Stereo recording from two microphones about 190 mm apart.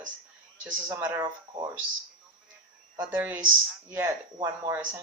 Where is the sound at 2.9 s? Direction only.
10° right (ahead or behind).